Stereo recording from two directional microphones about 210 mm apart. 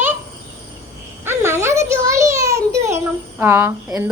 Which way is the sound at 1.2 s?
10° right (ahead or behind).